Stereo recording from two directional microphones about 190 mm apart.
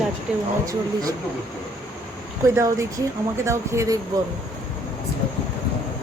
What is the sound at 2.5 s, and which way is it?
Speech, 15° right (ahead or behind).